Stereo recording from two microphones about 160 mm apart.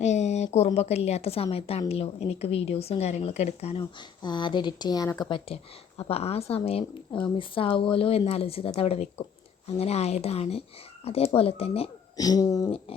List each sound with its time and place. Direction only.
0.0 s a woman's voice: 45° left (ahead or behind); by 5.4 s 25° left (ahead or behind)
6.0 s speech: 40° left (ahead or behind)
12.1 s a sound: 25° left (ahead or behind)